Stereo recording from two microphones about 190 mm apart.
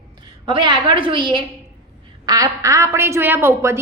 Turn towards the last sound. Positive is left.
turn(degrees=-15)  # may be behind; listen again after turning